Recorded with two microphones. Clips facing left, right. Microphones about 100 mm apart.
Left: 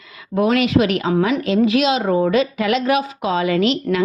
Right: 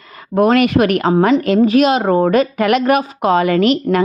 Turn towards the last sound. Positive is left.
turn(degrees=-50)  # may be behind; listen again after turning